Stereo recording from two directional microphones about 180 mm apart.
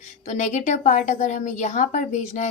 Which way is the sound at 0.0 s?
40° left (ahead or behind).